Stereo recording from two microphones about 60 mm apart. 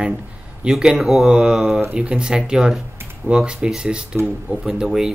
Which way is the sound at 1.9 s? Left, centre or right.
Centre.